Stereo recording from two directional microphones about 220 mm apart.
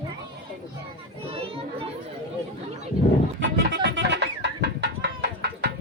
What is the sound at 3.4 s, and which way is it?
Chicken, 55° right (ahead or behind).